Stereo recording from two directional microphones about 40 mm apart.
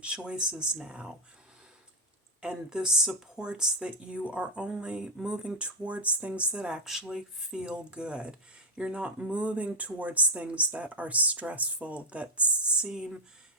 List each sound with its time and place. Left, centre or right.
0.3 s speech: right
2.4 s speech: right